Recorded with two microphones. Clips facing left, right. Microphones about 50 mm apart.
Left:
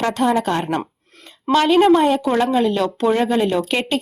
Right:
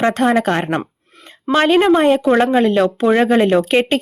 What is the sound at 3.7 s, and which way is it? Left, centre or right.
Speech, right.